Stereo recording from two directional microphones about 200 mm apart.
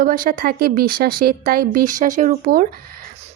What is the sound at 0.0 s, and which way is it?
Speech, 45° right (ahead or behind).